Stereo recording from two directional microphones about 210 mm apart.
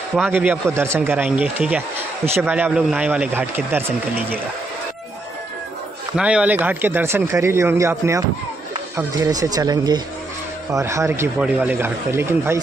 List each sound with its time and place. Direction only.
0.1 s a man's voice: 5° right (ahead or behind)
6.1 s speech: 5° right (ahead or behind)